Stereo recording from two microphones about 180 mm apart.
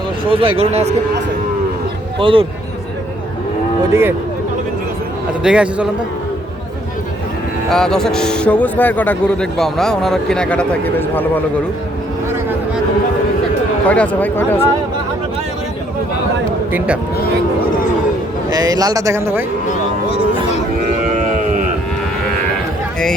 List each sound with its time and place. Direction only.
0.3 s speech: 30° right (ahead or behind)
2.1 s a man's voice: 30° right (ahead or behind)
5.4 s speech: 5° right (ahead or behind)
7.7 s speech: 5° left (ahead or behind)
13.8 s speech: 5° left (ahead or behind)
16.7 s a man's voice: 5° right (ahead or behind)
18.5 s speech: 20° right (ahead or behind)